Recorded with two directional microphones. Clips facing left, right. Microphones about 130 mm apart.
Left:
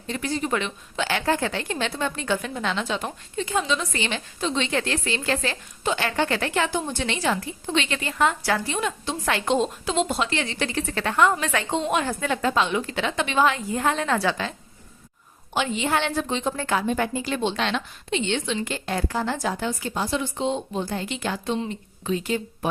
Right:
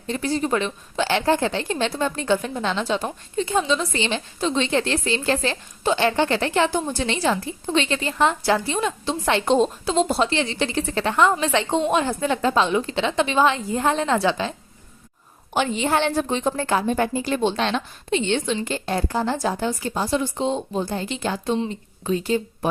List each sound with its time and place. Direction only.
0.1 s a woman's voice: 35° right (ahead or behind)
15.5 s a woman's voice: 40° right (ahead or behind)